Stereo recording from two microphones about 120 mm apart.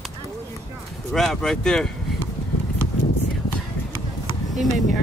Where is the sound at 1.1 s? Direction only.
5° left (ahead or behind).